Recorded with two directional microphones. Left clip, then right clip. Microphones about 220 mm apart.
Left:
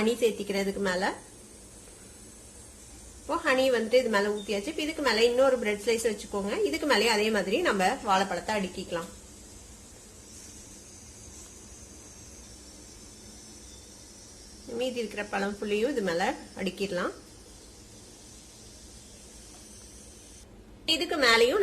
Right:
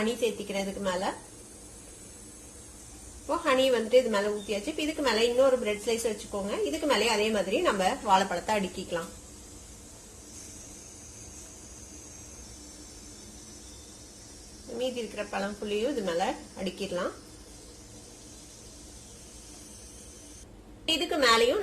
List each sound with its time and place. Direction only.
0.0 s speech: 25° left (ahead or behind)
3.2 s a woman's voice: 10° left (ahead or behind)
8.3 s a woman's voice: centre (ahead or behind)
14.8 s speech: 15° left (ahead or behind)
20.8 s a woman's voice: 5° left (ahead or behind)